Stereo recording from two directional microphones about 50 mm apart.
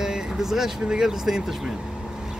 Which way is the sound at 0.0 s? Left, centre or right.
Centre.